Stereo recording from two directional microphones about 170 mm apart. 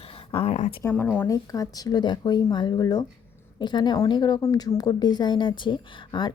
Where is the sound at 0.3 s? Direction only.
35° left (ahead or behind).